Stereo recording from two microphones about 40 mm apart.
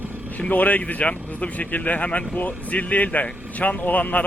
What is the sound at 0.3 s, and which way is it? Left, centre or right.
A man's voice, left.